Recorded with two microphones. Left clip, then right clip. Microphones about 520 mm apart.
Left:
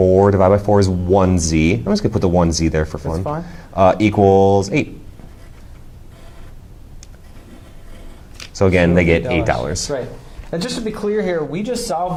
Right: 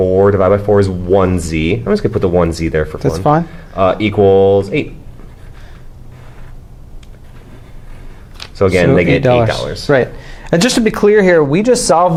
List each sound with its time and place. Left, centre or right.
0.0 s speech: centre
8.5 s speech: centre
10.5 s speech: right